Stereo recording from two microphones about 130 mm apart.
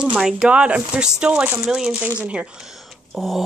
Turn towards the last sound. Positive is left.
turn(degrees=0)  # may be behind; listen again after turning